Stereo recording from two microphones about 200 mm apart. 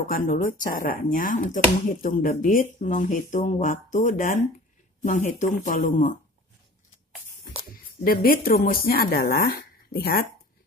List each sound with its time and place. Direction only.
0.1 s speech: 45° left (ahead or behind)
8.0 s speech: 45° left (ahead or behind)